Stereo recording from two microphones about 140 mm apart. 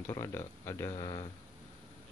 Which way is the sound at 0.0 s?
20° left (ahead or behind).